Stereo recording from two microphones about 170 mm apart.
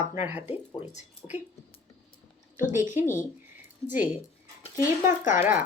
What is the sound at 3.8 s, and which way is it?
Speech, 10° right (ahead or behind).